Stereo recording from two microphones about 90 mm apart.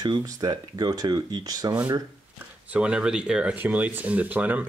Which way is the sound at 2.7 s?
10° right (ahead or behind).